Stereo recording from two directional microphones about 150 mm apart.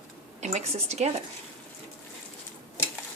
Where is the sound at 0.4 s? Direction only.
50° right (ahead or behind).